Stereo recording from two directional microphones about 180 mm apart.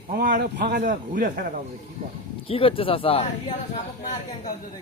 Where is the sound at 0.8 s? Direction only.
50° right (ahead or behind).